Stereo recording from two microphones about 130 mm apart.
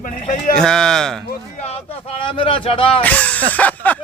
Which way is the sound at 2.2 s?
40° left (ahead or behind).